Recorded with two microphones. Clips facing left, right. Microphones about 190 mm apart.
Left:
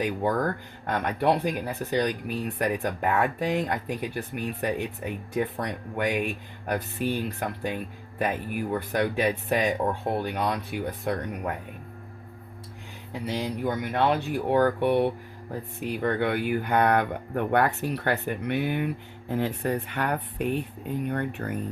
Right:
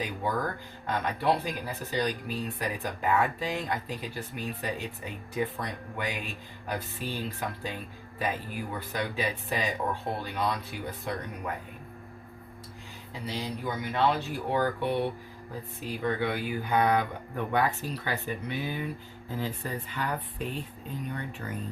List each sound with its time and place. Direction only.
0.9 s speech: 60° left (ahead or behind)
13.2 s speech: 55° left (ahead or behind)